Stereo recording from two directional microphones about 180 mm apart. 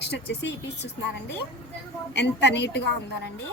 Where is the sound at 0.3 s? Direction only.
80° left.